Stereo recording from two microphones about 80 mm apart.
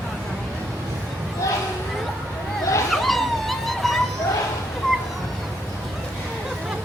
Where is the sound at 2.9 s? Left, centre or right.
Centre.